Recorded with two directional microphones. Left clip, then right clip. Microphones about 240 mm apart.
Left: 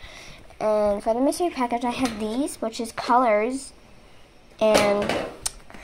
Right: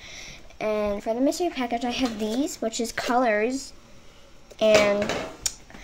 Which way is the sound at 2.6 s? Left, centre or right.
Centre.